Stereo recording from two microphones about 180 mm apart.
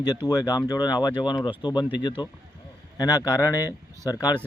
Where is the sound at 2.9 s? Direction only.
20° left (ahead or behind).